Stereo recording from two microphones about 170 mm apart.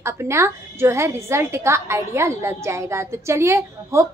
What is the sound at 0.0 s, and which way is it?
A woman's voice, 15° right (ahead or behind).